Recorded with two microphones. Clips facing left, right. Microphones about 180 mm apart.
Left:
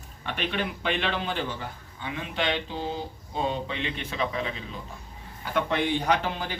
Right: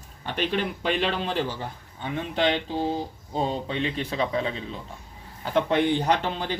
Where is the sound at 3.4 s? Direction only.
35° right (ahead or behind).